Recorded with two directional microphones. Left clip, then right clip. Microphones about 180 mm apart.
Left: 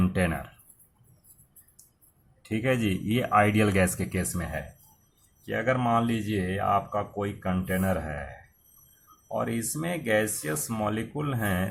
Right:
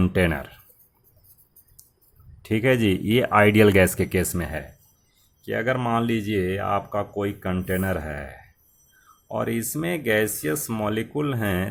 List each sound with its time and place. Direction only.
0.0 s speech: 45° right (ahead or behind)
2.4 s speech: 45° right (ahead or behind)